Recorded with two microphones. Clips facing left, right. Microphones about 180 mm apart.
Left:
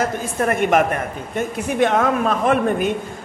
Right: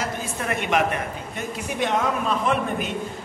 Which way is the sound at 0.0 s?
50° left (ahead or behind).